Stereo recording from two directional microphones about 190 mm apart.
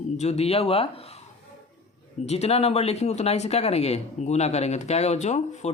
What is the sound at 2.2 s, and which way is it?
Speech, 35° left (ahead or behind).